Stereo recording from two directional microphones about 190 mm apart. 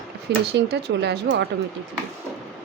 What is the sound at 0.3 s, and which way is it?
Speech, 60° right (ahead or behind).